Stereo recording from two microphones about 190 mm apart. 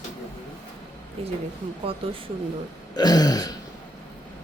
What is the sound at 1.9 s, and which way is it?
Speech, 30° right (ahead or behind).